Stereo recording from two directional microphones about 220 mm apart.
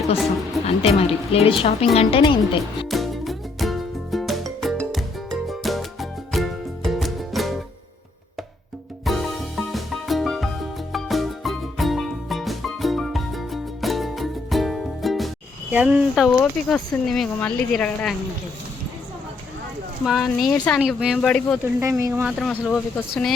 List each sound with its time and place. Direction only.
0.6 s a woman's voice: 30° left (ahead or behind)
2.8 s music: centre (ahead or behind)
9.0 s music: centre (ahead or behind)
15.7 s speech: 10° right (ahead or behind)
20.1 s speech: centre (ahead or behind)
21.6 s speech: 15° right (ahead or behind)
22.1 s speech: centre (ahead or behind)